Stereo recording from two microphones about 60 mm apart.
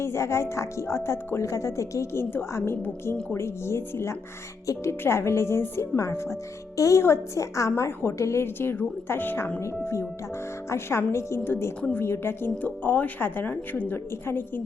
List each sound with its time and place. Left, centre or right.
0.0 s speech: left
4.6 s speech: left
4.9 s speech: left
6.7 s a woman's voice: left
7.9 s speech: left
9.6 s speech: left
12.6 s speech: left